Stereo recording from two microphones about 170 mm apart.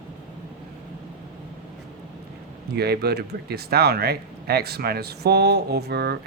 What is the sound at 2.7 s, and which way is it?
Speech, 70° right (ahead or behind).